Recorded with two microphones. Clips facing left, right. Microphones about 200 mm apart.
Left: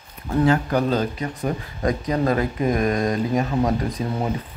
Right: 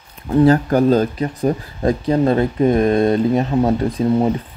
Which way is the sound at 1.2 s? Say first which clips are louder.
Right 7 dB; 30° right (ahead or behind).